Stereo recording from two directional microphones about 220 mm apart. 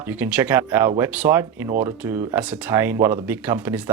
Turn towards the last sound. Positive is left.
turn(degrees=-10)  # may be behind; listen again after turning